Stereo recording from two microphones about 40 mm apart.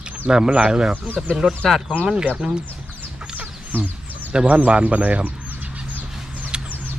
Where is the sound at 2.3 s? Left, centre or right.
Right.